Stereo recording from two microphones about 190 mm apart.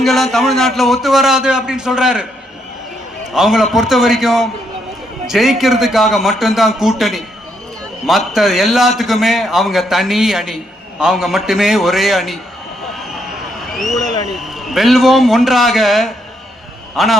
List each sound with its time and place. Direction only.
0.0 s a man's voice: centre (ahead or behind)
3.3 s a man's voice: centre (ahead or behind)
8.3 s a man's voice: centre (ahead or behind)
13.0 s a sound: centre (ahead or behind)
14.3 s a man's voice: centre (ahead or behind)